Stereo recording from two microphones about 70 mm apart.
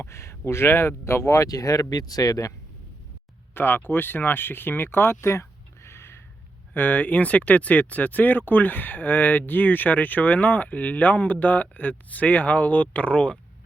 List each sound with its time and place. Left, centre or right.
0.0 s speech: left
3.5 s speech: left
6.7 s speech: left